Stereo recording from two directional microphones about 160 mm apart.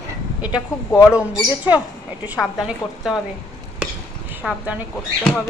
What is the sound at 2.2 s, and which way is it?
Speech, 5° right (ahead or behind).